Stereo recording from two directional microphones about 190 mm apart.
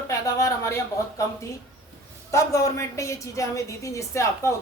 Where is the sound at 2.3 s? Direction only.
15° left (ahead or behind).